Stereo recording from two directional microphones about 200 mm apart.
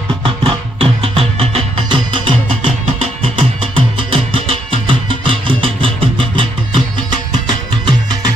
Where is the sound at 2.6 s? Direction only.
30° right (ahead or behind).